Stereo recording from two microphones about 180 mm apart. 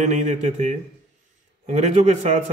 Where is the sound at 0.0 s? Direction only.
40° right (ahead or behind).